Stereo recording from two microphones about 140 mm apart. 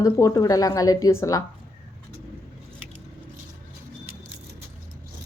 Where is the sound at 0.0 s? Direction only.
25° left (ahead or behind).